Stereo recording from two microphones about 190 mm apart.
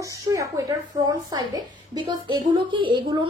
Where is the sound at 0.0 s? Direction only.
15° right (ahead or behind).